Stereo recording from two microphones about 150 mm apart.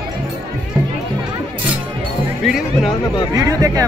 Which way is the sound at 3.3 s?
20° right (ahead or behind).